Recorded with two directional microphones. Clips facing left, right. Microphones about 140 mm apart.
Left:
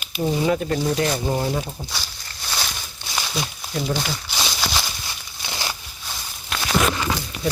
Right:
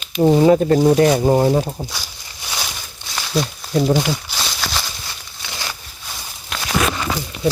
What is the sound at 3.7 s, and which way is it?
Speech, 45° right (ahead or behind).